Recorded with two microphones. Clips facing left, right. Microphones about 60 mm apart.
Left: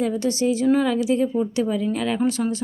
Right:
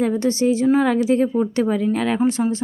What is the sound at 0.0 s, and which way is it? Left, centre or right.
A woman's voice, right.